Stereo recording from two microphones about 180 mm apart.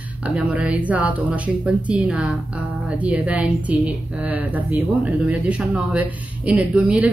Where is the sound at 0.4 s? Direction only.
10° right (ahead or behind).